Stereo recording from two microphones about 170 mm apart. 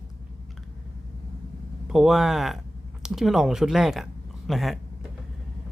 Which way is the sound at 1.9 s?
Centre (ahead or behind).